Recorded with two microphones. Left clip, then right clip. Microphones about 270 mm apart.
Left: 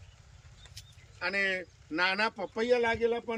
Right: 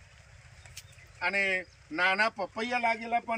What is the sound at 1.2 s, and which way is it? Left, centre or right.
Speech, centre.